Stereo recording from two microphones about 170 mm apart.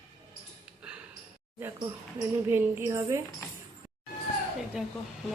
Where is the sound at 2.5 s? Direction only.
15° right (ahead or behind).